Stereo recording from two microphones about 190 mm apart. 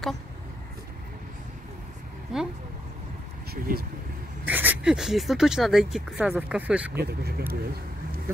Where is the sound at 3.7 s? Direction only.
50° right (ahead or behind).